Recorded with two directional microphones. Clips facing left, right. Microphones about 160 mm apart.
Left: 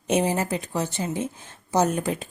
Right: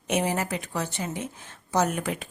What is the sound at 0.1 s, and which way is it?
A woman's voice, 25° left (ahead or behind).